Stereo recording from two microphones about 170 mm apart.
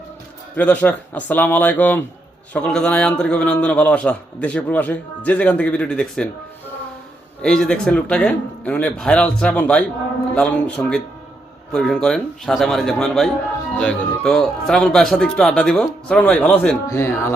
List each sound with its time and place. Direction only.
0.5 s a man's voice: 10° left (ahead or behind)
7.4 s a man's voice: 5° left (ahead or behind)
16.8 s a man's voice: 15° left (ahead or behind)